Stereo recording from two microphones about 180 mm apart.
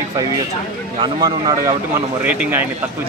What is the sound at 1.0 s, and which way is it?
Speech, 25° right (ahead or behind).